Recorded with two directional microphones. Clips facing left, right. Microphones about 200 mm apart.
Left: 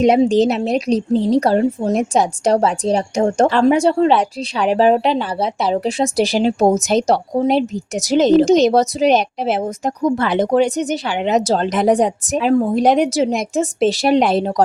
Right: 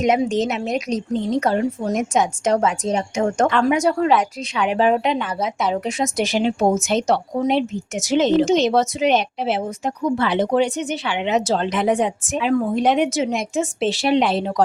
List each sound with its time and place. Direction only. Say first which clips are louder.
0.0 s a woman's voice: left 6 dB; 30° left (ahead or behind)